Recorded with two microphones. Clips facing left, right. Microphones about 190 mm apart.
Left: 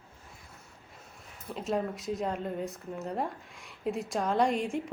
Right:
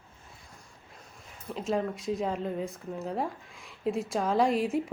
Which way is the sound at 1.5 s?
Centre (ahead or behind).